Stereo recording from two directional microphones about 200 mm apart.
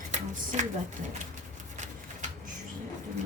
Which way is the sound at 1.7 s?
35° right (ahead or behind).